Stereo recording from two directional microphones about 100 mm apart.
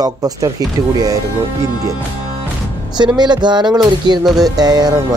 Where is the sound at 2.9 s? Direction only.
45° right (ahead or behind).